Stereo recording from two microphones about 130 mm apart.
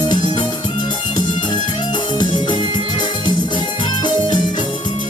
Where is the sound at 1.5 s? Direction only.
35° left (ahead or behind).